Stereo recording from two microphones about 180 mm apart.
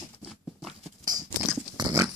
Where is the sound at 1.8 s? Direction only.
15° right (ahead or behind).